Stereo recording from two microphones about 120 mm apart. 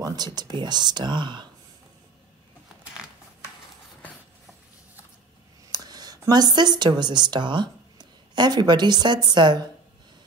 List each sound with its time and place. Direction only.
0.0 s speech: 35° right (ahead or behind)
5.7 s speech: 35° right (ahead or behind)